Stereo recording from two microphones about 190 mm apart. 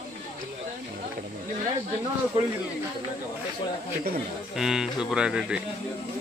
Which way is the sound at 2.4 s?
30° right (ahead or behind).